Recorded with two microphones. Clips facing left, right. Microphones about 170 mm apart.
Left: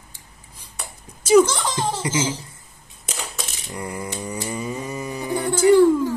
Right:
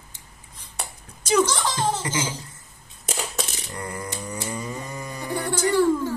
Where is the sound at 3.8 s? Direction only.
10° left (ahead or behind).